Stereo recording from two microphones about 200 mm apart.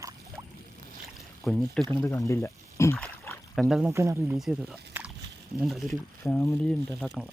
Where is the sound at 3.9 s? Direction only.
15° right (ahead or behind).